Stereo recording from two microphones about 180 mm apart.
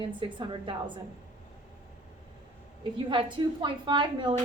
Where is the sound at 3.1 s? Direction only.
25° right (ahead or behind).